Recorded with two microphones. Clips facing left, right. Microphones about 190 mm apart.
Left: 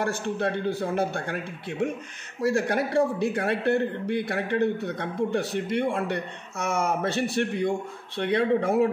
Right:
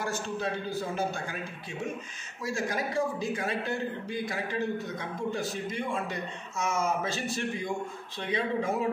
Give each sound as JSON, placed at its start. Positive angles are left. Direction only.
{"t": 0.0, "sound": "a man's voice", "side_deg": 65}